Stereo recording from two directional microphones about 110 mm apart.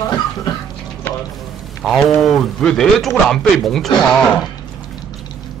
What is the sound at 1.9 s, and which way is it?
Speech, centre (ahead or behind).